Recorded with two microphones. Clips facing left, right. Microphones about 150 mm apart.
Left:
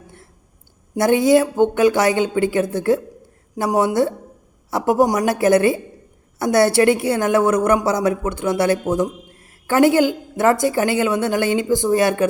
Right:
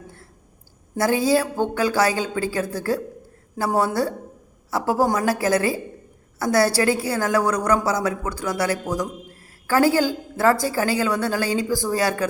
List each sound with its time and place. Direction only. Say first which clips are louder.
0.9 s a woman's voice: left 5 dB; 25° left (ahead or behind)